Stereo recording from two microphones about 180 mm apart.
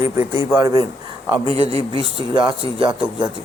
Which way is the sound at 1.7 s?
30° right (ahead or behind).